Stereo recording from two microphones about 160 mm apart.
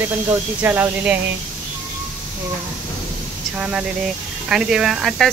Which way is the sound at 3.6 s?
5° right (ahead or behind).